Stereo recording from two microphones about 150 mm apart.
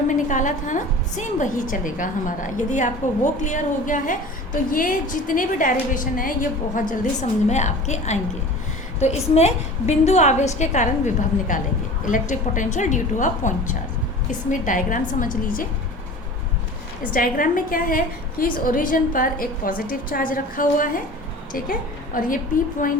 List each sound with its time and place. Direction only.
0.1 s a woman's voice: 55° left (ahead or behind)
6.9 s a woman's voice: 55° left (ahead or behind)
17.1 s a woman's voice: 70° left (ahead or behind)